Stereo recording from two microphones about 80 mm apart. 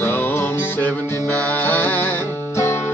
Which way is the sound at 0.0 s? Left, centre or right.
Left.